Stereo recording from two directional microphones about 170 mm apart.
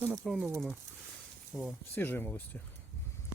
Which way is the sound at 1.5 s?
Centre (ahead or behind).